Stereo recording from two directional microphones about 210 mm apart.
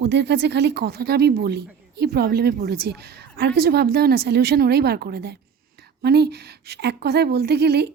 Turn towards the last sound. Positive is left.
turn(degrees=-50)  # may be behind; listen again after turning